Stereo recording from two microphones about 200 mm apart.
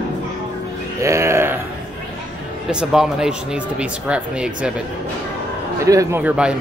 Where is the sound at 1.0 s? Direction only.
15° right (ahead or behind).